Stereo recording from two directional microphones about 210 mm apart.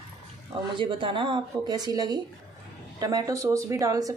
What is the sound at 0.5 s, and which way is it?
Speech, 25° right (ahead or behind).